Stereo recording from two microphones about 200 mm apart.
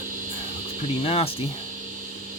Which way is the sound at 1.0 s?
30° left (ahead or behind).